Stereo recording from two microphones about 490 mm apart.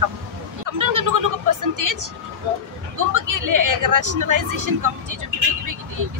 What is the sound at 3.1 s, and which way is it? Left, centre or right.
Speech, right.